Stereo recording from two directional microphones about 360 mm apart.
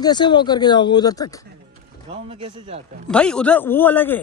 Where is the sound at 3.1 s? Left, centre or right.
Centre.